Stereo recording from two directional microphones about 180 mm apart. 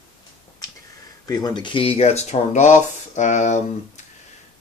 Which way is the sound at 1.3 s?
20° left (ahead or behind).